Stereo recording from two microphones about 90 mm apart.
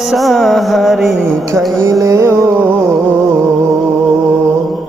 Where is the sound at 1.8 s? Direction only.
35° right (ahead or behind).